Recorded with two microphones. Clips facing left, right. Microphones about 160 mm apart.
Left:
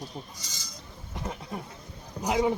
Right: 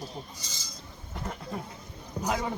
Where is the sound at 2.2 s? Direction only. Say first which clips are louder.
Left 5 dB; 15° left (ahead or behind).